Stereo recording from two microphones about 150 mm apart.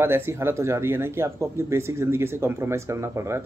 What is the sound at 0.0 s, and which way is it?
Speech, 15° right (ahead or behind).